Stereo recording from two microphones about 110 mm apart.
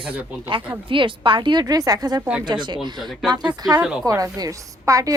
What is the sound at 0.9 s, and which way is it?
A woman's voice, 50° right (ahead or behind).